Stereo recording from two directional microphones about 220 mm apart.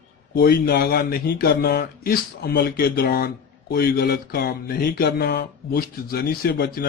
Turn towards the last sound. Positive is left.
turn(degrees=45)  # may be behind; listen again after turning